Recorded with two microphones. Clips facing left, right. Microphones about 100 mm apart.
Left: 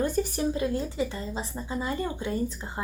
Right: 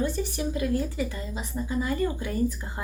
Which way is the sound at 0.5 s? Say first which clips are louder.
Right 1 dB; 25° left (ahead or behind).